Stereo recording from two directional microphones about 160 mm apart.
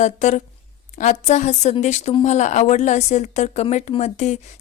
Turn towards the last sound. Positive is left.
turn(degrees=45)  # may be behind; listen again after turning